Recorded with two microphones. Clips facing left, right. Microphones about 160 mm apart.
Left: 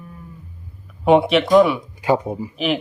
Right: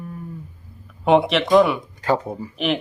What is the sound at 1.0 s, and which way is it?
Speech, centre (ahead or behind).